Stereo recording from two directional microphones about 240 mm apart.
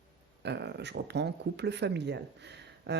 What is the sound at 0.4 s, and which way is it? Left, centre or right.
Speech, right.